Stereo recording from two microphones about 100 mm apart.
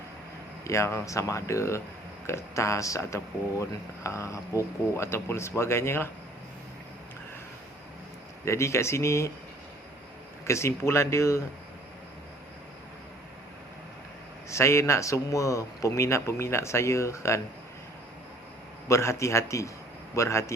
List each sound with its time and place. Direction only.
0.6 s a man's voice: 30° left (ahead or behind)
8.4 s a man's voice: 30° left (ahead or behind)
10.4 s a man's voice: 30° left (ahead or behind)
14.5 s a man's voice: 30° left (ahead or behind)
18.9 s a man's voice: 30° left (ahead or behind)